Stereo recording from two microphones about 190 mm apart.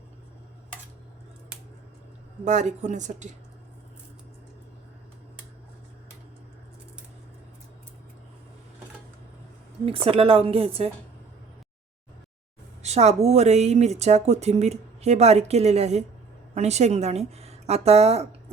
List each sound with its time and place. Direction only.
2.4 s speech: 40° right (ahead or behind)
9.8 s a woman's voice: 30° right (ahead or behind)
12.8 s speech: 35° right (ahead or behind)